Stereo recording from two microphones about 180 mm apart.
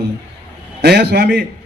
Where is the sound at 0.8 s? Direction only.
65° right (ahead or behind).